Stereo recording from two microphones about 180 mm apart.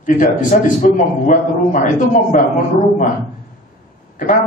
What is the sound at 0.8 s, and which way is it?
A man's voice, 45° left (ahead or behind).